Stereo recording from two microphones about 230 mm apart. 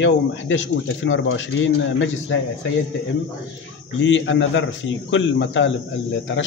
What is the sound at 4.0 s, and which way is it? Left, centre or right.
A man's voice, left.